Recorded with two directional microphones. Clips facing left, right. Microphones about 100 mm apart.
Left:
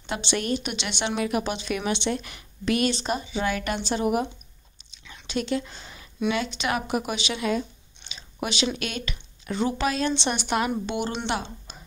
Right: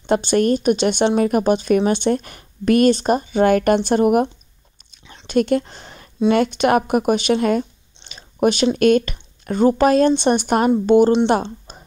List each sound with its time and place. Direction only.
0.0 s speech: 45° right (ahead or behind)
8.1 s a sound: 50° right (ahead or behind)
8.7 s speech: 50° right (ahead or behind)